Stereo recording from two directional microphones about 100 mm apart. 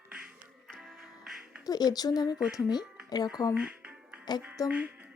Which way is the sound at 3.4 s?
40° left (ahead or behind).